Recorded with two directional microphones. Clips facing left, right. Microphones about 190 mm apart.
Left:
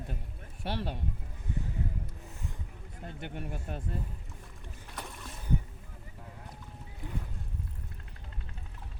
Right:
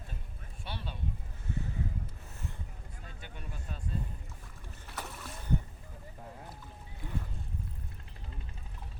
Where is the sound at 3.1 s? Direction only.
60° left (ahead or behind).